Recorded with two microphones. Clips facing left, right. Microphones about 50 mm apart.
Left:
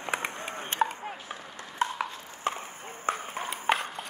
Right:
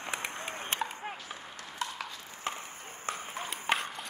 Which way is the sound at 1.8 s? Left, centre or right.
Left.